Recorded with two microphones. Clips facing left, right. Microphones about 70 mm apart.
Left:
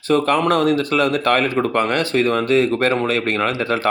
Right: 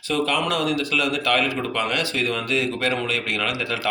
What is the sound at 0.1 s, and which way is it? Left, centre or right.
Speech, left.